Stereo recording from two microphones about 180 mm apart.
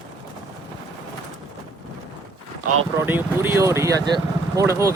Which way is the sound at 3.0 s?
10° right (ahead or behind).